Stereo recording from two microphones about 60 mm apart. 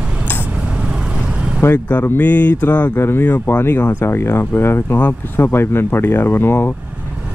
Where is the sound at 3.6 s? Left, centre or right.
Left.